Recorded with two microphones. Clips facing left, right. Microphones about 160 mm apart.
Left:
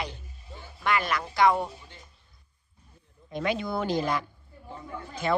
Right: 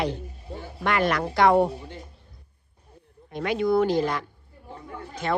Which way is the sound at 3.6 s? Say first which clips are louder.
Right 7 dB; 60° right (ahead or behind).